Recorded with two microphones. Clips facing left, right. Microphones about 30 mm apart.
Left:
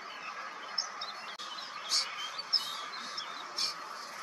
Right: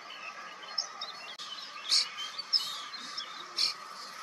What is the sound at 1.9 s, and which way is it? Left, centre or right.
Bird, right.